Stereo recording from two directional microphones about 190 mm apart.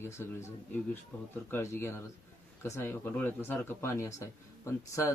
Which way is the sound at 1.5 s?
15° left (ahead or behind).